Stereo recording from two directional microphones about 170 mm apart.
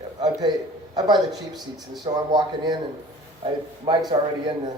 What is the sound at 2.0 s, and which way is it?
Speech, 25° right (ahead or behind).